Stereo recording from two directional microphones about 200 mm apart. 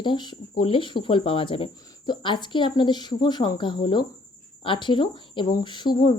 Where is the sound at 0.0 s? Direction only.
25° left (ahead or behind).